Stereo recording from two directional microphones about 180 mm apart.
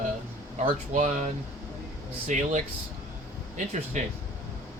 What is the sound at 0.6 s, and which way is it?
Speech, 40° right (ahead or behind).